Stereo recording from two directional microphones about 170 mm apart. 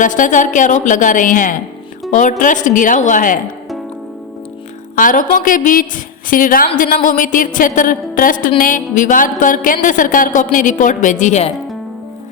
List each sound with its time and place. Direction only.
0.0 s a woman's voice: 50° left (ahead or behind)
4.9 s a woman's voice: 50° left (ahead or behind)